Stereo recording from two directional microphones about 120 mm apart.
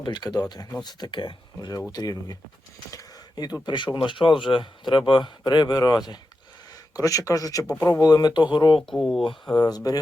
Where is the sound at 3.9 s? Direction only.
45° left (ahead or behind).